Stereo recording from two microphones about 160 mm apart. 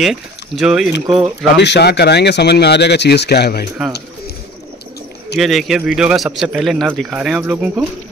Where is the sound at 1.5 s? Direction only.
90° left.